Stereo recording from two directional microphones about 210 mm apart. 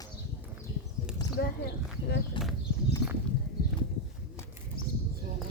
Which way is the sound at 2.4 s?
25° left (ahead or behind).